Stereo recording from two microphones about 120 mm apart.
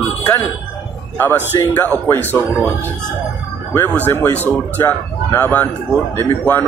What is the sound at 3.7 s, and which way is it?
Speech, 15° left (ahead or behind).